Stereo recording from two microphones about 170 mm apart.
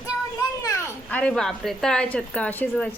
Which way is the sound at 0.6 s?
20° left (ahead or behind).